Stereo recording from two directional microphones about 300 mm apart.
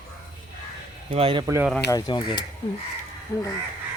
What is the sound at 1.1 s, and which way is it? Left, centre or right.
Speech, centre.